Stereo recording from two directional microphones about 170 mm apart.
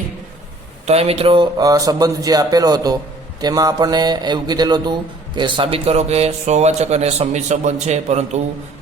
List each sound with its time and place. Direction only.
0.9 s a man's voice: 35° right (ahead or behind)